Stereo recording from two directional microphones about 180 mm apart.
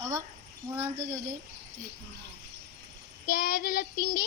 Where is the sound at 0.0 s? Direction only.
15° right (ahead or behind).